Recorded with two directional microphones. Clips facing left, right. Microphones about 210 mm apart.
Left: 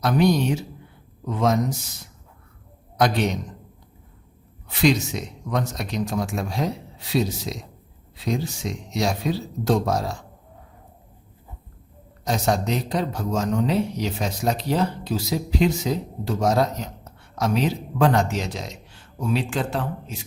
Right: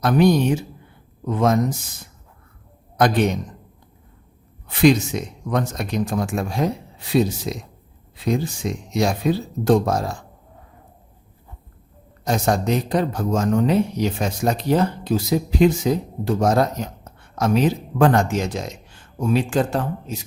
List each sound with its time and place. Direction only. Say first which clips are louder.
0.0 s speech: right 3 dB; 50° right (ahead or behind)
3.0 s speech: right 3 dB; 50° right (ahead or behind)
4.7 s speech: right 5 dB; 55° right (ahead or behind)
12.2 s speech: right 2 dB; 50° right (ahead or behind)